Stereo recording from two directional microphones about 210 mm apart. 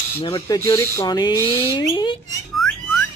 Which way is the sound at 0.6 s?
15° left (ahead or behind).